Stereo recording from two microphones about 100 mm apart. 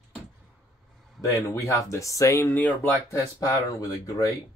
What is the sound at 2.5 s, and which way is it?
Speech, 20° left (ahead or behind).